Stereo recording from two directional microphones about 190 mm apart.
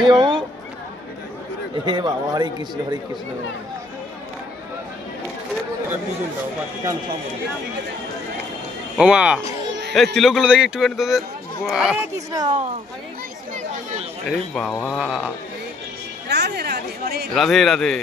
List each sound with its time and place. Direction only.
0.1 s a sound: 25° right (ahead or behind)
1.9 s a man's voice: 20° right (ahead or behind)
8.9 s speech: 5° right (ahead or behind)
12.3 s a man's voice: 25° right (ahead or behind)
14.3 s speech: 5° left (ahead or behind)
15.0 s speech: 5° right (ahead or behind)
16.3 s speech: 60° right (ahead or behind)
17.3 s speech: centre (ahead or behind)